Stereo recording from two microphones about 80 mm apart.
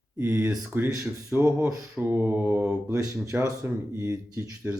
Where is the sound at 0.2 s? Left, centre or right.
Right.